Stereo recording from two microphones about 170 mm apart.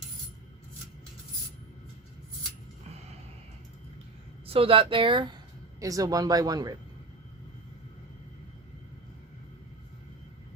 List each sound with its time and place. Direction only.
4.4 s speech: 35° right (ahead or behind)